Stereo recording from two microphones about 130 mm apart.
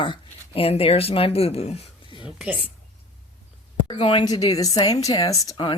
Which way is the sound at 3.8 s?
40° left (ahead or behind).